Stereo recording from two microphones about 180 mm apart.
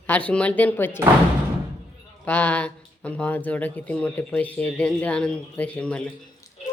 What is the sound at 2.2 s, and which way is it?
Speech, 10° left (ahead or behind).